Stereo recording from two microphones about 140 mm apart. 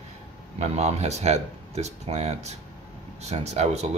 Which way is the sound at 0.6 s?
50° right (ahead or behind).